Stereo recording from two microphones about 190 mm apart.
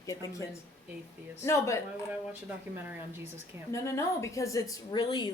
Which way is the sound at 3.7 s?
15° left (ahead or behind).